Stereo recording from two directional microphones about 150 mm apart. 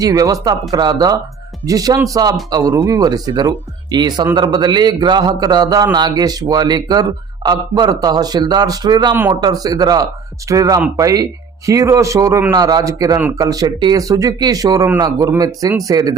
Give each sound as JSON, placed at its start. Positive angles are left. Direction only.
{"t": 0.0, "sound": "a man's voice", "side_deg": -25}